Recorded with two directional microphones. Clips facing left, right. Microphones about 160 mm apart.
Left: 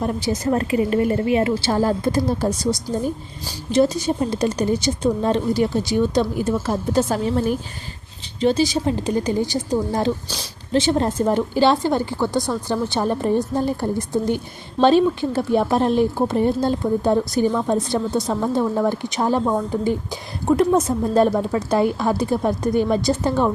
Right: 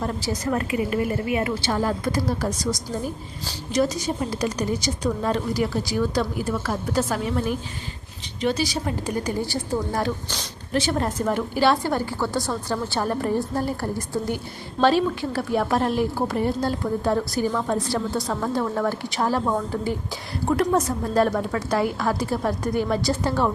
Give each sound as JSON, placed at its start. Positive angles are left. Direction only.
{"t": 0.0, "sound": "a woman's voice", "side_deg": 20}